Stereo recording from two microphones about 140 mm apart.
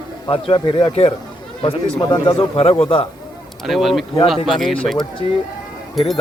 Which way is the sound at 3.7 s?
Centre (ahead or behind).